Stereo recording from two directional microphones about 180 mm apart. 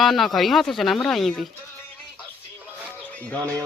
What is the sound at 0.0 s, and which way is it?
Speech, centre (ahead or behind).